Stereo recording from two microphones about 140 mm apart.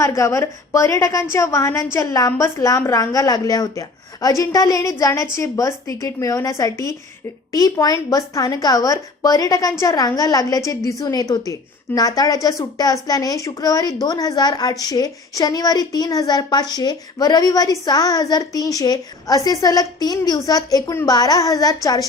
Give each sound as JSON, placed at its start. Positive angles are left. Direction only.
{"t": 0.0, "sound": "a woman's voice", "side_deg": 20}